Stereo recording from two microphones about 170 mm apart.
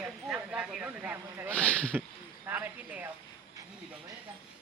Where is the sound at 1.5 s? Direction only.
5° left (ahead or behind).